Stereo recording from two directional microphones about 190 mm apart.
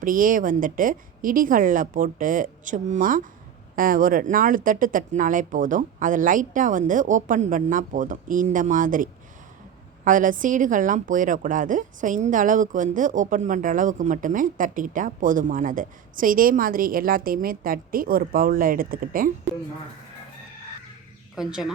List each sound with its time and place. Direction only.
0.0 s a woman's voice: 45° right (ahead or behind)
21.3 s speech: centre (ahead or behind)